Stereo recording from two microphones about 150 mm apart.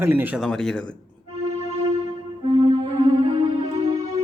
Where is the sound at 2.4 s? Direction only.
35° right (ahead or behind).